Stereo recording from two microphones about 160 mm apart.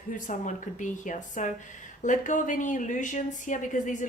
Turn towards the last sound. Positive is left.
turn(degrees=50)  # may be behind; listen again after turning